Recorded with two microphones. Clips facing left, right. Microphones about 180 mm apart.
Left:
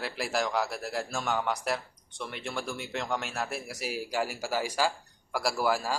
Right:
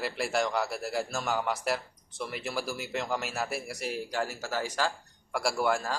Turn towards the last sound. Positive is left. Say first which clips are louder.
# even
turn(degrees=5)  # may be behind; listen again after turning